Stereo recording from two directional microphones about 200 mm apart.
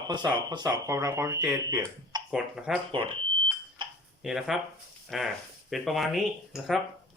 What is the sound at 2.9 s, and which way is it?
Speech, 25° right (ahead or behind).